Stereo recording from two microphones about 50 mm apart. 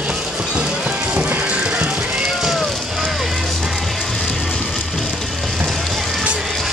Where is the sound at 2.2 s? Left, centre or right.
Centre.